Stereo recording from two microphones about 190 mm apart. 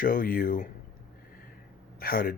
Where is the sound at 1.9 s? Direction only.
50° left (ahead or behind).